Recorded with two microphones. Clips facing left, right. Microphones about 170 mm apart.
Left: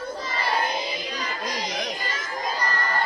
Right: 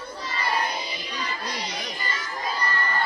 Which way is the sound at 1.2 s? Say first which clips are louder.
Right 2 dB; 45° left (ahead or behind).